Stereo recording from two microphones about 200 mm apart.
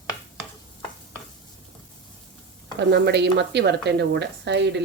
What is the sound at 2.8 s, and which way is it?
Speech, 55° right (ahead or behind).